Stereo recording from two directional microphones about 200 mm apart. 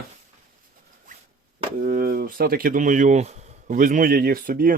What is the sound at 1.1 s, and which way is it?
Zipper, 40° right (ahead or behind).